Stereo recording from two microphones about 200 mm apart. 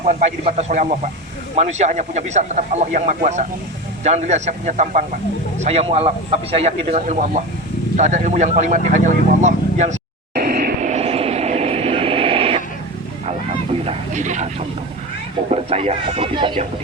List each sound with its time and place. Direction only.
0.1 s speech: 35° right (ahead or behind)
10.3 s vehicle: 50° right (ahead or behind); by 12.6 s 30° right (ahead or behind)
13.8 s a sound: 35° right (ahead or behind)
15.4 s speech: 30° right (ahead or behind)